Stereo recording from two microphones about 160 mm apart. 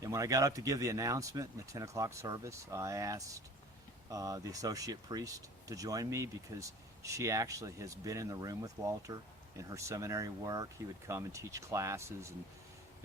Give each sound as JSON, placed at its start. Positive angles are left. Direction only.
{"t": 0.0, "sound": "speech", "side_deg": -20}